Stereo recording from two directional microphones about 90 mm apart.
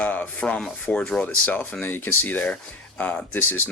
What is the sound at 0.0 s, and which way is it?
Speech, 20° left (ahead or behind).